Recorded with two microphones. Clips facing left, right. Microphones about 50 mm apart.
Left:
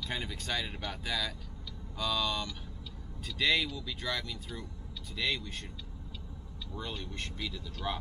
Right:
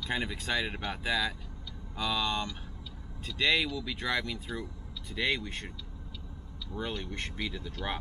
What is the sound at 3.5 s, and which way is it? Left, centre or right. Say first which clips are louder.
Speech: right 2 dB; right.